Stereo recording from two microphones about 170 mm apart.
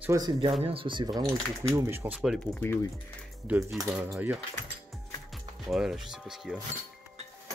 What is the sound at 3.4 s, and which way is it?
Speech, 10° right (ahead or behind).